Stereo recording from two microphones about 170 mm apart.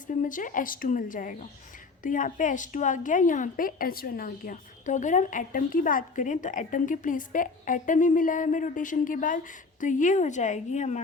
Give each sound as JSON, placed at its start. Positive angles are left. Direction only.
{"t": 0.2, "sound": "a woman's voice", "side_deg": 50}